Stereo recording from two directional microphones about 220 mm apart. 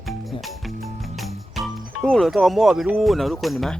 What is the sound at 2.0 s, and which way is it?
Speech, centre (ahead or behind).